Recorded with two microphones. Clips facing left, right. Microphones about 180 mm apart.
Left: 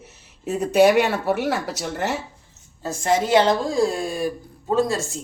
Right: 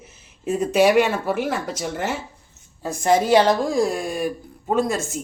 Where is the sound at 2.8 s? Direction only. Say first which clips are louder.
Right 1 dB; 15° right (ahead or behind).